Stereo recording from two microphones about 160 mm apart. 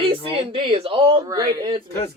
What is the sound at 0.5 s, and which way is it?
Speech, 35° right (ahead or behind).